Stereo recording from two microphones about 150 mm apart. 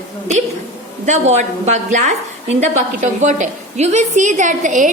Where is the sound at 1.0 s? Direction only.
50° right (ahead or behind).